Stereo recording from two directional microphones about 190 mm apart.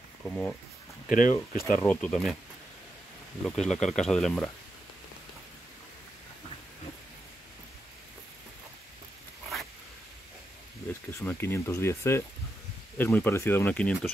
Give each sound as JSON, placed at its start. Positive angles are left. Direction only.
{"t": 0.2, "sound": "speech", "side_deg": 5}
{"t": 1.0, "sound": "speech", "side_deg": 45}
{"t": 1.3, "sound": "speech", "side_deg": 15}
{"t": 3.4, "sound": "speech", "side_deg": 5}
{"t": 11.1, "sound": "speech", "side_deg": 10}